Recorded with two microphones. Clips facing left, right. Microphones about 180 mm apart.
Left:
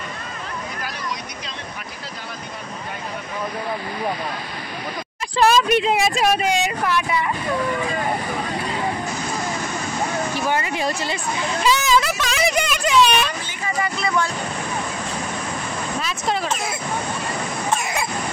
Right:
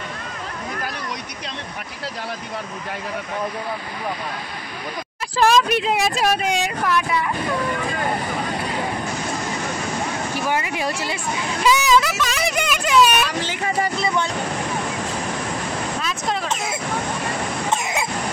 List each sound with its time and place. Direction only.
5.4 s speech: centre (ahead or behind)
10.5 s speech: 10° right (ahead or behind)
13.3 s speech: 90° right
13.7 s speech: 30° right (ahead or behind)
16.0 s a sound: centre (ahead or behind)
16.4 s speech: 20° right (ahead or behind)
17.6 s a sound: 20° right (ahead or behind)